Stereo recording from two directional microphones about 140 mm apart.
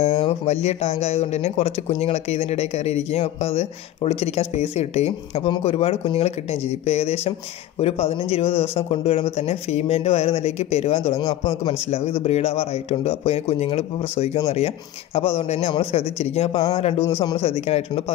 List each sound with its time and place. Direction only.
0.0 s speech: 45° left (ahead or behind)